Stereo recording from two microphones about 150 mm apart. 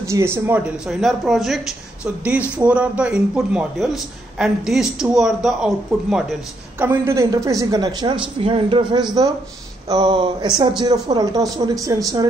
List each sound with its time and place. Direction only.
0.0 s a man's voice: 20° right (ahead or behind)
6.8 s a woman's voice: 15° right (ahead or behind)
8.4 s a woman's voice: 40° right (ahead or behind); by 12.3 s 25° right (ahead or behind)